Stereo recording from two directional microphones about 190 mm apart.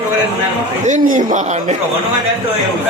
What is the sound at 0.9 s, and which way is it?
Speech, 40° right (ahead or behind).